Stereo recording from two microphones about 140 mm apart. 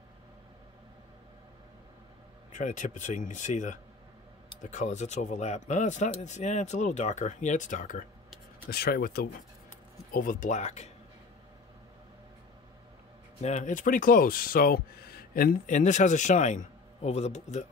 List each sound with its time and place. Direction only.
2.5 s speech: 60° left (ahead or behind)
8.6 s speech: 90° left
10.1 s speech: 75° left (ahead or behind); by 10.9 s 55° left (ahead or behind)
13.4 s speech: 60° left (ahead or behind)